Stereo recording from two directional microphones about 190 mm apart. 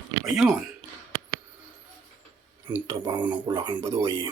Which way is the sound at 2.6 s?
10° right (ahead or behind).